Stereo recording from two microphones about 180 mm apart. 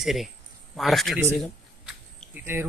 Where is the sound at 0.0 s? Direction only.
Centre (ahead or behind).